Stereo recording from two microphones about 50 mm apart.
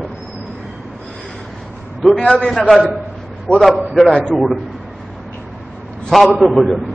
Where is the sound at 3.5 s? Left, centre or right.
Left.